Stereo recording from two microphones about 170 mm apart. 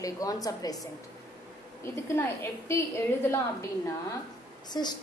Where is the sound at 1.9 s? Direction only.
15° left (ahead or behind).